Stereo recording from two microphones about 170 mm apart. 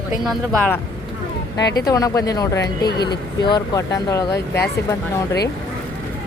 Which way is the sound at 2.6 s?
70° left (ahead or behind).